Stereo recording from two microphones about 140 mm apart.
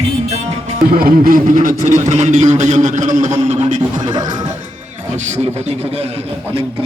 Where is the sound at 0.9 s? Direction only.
85° right.